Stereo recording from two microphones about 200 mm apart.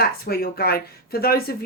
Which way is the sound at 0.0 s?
50° left (ahead or behind).